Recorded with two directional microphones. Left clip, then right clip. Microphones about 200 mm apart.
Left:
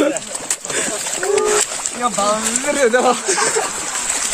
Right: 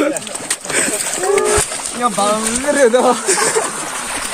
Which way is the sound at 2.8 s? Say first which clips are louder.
Right 2 dB; 25° left (ahead or behind).